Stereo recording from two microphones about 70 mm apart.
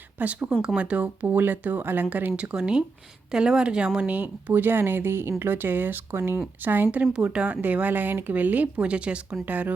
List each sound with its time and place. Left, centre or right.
0.2 s speech: right
7.1 s speech: centre